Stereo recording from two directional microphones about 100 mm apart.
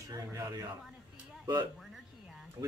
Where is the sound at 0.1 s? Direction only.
35° right (ahead or behind).